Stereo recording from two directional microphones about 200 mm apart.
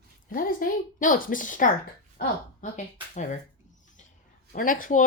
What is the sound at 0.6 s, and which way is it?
Speech, 45° left (ahead or behind).